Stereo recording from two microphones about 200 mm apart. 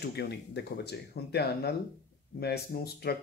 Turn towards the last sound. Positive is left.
turn(degrees=50)  # may be behind; listen again after turning